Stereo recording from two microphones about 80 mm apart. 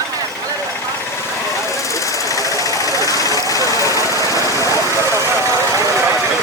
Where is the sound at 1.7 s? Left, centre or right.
Left.